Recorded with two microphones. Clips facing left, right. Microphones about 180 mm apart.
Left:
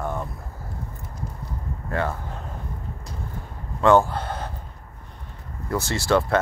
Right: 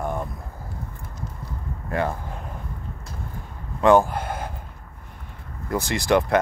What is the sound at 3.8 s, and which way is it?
Speech, 15° right (ahead or behind).